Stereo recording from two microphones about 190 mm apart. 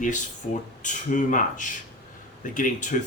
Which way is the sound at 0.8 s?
45° left (ahead or behind).